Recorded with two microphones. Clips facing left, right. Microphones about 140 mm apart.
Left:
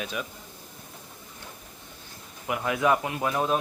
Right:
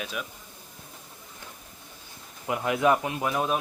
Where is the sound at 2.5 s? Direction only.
25° right (ahead or behind).